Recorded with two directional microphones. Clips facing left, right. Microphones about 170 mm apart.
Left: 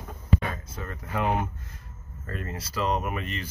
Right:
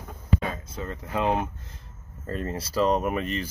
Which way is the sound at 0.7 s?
20° right (ahead or behind).